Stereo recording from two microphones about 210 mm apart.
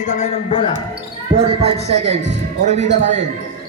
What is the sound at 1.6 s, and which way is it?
A man's voice, 30° right (ahead or behind).